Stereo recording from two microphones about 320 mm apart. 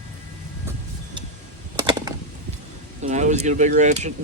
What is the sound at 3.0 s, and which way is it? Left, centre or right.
Speech, right.